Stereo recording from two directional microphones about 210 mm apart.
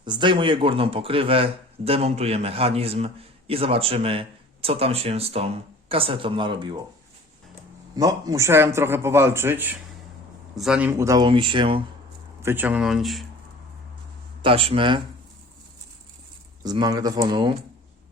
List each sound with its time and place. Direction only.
0.0 s speech: 20° right (ahead or behind)
7.9 s a man's voice: 15° right (ahead or behind)
12.4 s speech: 10° right (ahead or behind)
14.4 s speech: 25° right (ahead or behind)
16.6 s speech: 20° right (ahead or behind)